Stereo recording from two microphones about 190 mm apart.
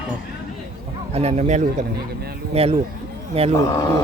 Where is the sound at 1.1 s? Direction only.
35° right (ahead or behind).